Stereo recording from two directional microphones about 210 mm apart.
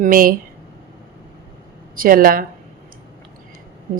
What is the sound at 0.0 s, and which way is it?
Speech, 40° right (ahead or behind).